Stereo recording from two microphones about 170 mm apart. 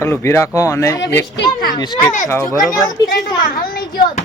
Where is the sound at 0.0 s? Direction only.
15° left (ahead or behind).